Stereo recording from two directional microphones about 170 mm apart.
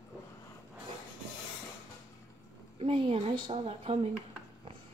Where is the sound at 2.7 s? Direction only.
35° right (ahead or behind).